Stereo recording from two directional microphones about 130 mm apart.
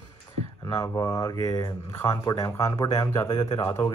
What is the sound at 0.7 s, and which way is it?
Speech, 25° left (ahead or behind).